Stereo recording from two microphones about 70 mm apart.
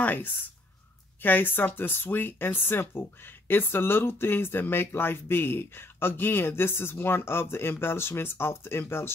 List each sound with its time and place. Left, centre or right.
0.0 s speech: left